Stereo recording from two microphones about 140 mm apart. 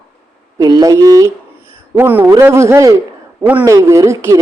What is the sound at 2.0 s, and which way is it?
A man's voice, 15° right (ahead or behind).